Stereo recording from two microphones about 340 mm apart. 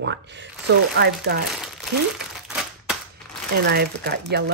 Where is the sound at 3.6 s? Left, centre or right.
Right.